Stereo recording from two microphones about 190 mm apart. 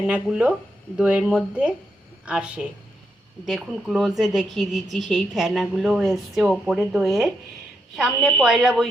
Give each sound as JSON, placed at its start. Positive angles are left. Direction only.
{"t": 0.1, "sound": "a woman's voice", "side_deg": -5}